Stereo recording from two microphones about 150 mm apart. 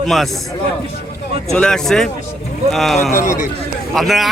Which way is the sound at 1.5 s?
5° left (ahead or behind).